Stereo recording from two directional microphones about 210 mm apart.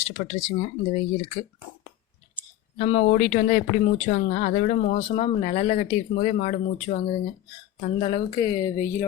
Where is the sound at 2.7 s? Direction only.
30° left (ahead or behind).